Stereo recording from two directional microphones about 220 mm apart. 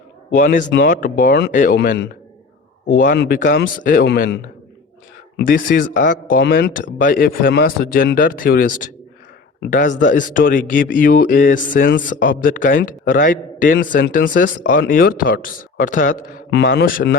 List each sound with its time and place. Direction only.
0.3 s a man's voice: 40° left (ahead or behind)
5.5 s a man's voice: 40° left (ahead or behind)
7.0 s a man's voice: 40° left (ahead or behind)